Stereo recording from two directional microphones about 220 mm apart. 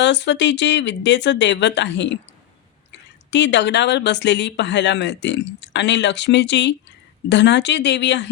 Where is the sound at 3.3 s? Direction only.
55° left (ahead or behind).